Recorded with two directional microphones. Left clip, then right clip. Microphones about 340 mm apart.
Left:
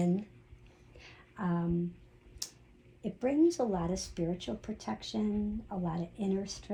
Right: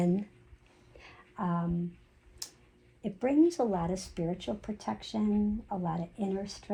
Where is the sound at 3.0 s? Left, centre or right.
Right.